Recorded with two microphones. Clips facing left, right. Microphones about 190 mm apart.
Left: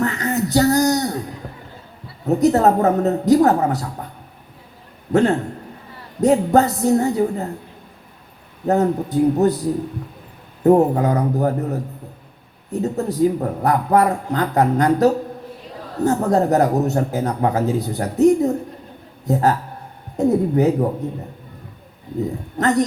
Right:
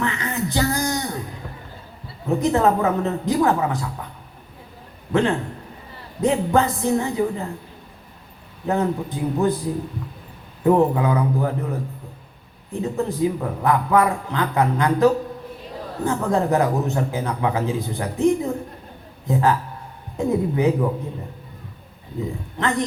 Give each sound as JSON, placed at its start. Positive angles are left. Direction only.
{"t": 0.0, "sound": "a sound", "side_deg": 40}
{"t": 2.2, "sound": "speech", "side_deg": 40}
{"t": 5.1, "sound": "speech", "side_deg": 40}
{"t": 8.6, "sound": "speech", "side_deg": 40}
{"t": 10.6, "sound": "speech", "side_deg": 40}
{"t": 22.5, "sound": "speech", "side_deg": 40}